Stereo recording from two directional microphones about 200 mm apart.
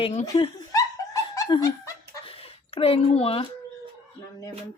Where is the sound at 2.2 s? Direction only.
30° left (ahead or behind).